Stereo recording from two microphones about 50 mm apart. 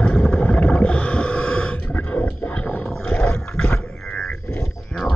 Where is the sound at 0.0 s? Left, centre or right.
Centre.